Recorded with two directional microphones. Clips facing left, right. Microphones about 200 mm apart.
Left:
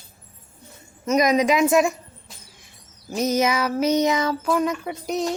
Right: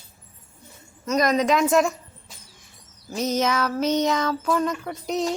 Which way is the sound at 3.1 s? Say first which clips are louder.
Left 2 dB; 10° left (ahead or behind).